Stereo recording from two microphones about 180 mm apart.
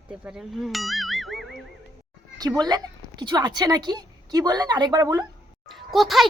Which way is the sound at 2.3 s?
20° right (ahead or behind).